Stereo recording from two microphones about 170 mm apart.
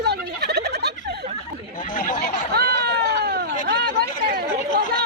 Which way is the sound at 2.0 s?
50° left (ahead or behind).